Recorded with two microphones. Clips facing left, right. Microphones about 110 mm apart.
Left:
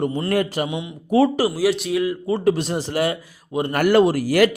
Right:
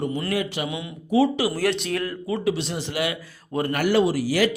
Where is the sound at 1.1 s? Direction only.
55° left (ahead or behind).